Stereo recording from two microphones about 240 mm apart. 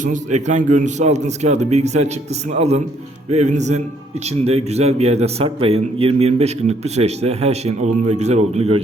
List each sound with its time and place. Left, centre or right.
0.0 s a man's voice: right